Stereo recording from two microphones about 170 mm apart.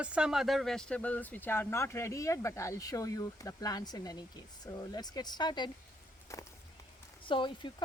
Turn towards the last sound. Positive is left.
turn(degrees=30)  # may be behind; listen again after turning